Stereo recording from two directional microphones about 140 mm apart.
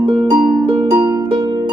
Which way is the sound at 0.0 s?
35° right (ahead or behind).